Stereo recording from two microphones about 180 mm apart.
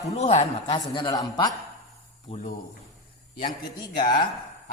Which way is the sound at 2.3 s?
35° left (ahead or behind).